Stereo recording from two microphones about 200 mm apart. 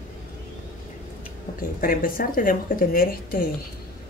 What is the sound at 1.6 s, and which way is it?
Speech, 45° left (ahead or behind).